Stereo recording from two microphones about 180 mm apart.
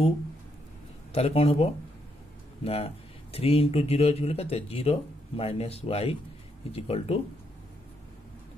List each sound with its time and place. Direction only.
1.1 s speech: 35° left (ahead or behind)